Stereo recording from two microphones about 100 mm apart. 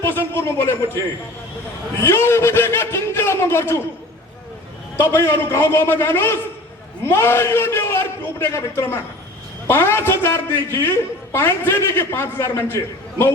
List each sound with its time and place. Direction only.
0.0 s a man's voice: 25° left (ahead or behind)
2.0 s a man's voice: 25° left (ahead or behind)
4.9 s a man's voice: 25° left (ahead or behind)